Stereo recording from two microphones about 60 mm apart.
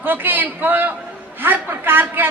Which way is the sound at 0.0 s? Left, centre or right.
Right.